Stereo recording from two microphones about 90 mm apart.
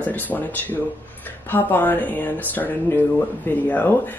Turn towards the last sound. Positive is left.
turn(degrees=20)  # may be behind; listen again after turning